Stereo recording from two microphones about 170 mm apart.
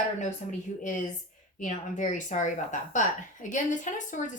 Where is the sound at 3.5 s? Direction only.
45° left (ahead or behind).